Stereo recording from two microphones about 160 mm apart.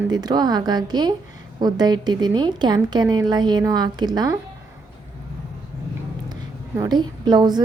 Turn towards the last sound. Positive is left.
turn(degrees=-25)  # may be behind; listen again after turning